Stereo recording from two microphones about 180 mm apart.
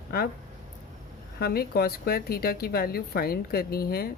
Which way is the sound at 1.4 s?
60° left (ahead or behind).